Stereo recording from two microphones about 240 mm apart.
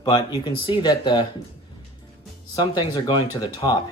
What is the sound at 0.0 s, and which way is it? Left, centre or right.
Speech, centre.